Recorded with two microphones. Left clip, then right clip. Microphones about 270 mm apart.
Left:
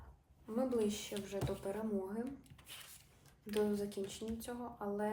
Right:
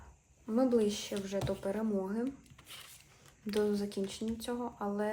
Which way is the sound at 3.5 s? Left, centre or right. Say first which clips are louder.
Right 4 dB; right.